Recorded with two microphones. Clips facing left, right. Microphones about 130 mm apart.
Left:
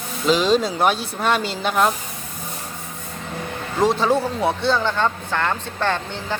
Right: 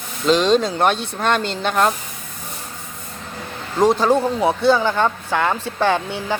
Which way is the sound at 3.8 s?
Centre (ahead or behind).